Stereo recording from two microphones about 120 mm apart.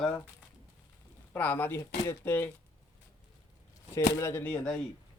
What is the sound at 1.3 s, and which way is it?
A man's voice, 15° left (ahead or behind).